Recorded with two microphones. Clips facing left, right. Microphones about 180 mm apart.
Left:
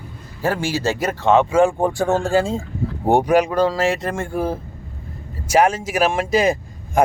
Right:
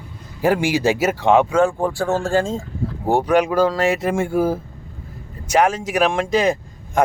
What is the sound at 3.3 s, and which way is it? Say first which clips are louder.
Speech: even; centre (ahead or behind).